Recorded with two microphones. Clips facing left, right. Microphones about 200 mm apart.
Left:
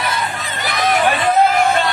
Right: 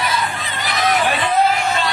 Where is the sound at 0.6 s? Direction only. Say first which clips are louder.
Left 2 dB; 50° left (ahead or behind).